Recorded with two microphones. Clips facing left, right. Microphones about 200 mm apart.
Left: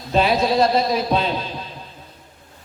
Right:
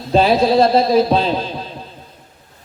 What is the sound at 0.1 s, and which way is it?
Speech, 30° right (ahead or behind).